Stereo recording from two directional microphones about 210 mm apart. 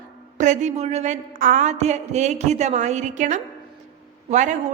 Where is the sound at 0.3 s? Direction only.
35° right (ahead or behind).